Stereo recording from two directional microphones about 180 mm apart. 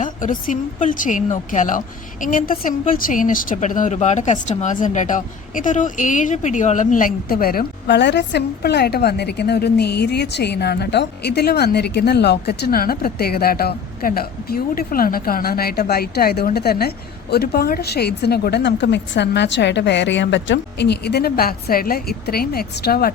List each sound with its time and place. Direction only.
0.0 s a woman's voice: 45° left (ahead or behind)